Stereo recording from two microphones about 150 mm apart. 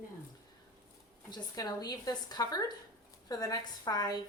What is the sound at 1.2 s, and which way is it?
Speech, 25° left (ahead or behind).